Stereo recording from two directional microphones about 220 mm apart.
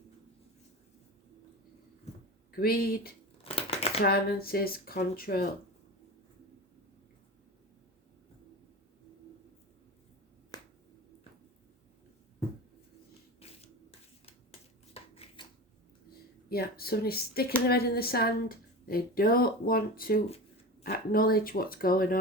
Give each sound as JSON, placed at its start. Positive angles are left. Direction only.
{"t": 2.5, "sound": "a woman's voice", "side_deg": 45}
{"t": 3.4, "sound": "shuffling cards", "side_deg": 25}
{"t": 4.0, "sound": "a woman's voice", "side_deg": 45}
{"t": 10.5, "sound": "finger snapping", "side_deg": 15}
{"t": 13.4, "sound": "a sound", "side_deg": 25}
{"t": 14.9, "sound": "a sound", "side_deg": 25}
{"t": 16.5, "sound": "a woman's voice", "side_deg": 45}